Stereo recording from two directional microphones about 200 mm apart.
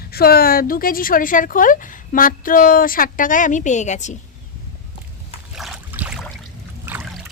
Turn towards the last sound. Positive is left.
turn(degrees=-10)  # may be behind; listen again after turning